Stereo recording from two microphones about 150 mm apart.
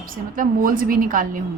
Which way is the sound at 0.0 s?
65° right (ahead or behind).